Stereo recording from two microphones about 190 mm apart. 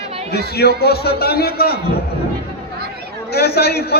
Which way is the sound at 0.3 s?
55° left (ahead or behind).